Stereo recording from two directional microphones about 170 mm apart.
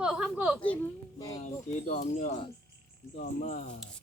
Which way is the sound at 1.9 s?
50° left (ahead or behind).